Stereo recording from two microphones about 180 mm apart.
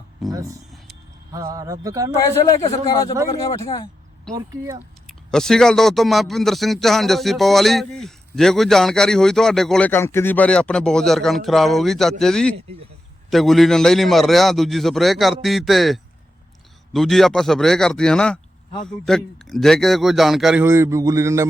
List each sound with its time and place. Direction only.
0.3 s speech: 20° right (ahead or behind)
2.1 s a man's voice: 15° left (ahead or behind)
4.3 s speech: 20° right (ahead or behind)
5.0 s speech: centre (ahead or behind)
20.7 s speech: 15° right (ahead or behind)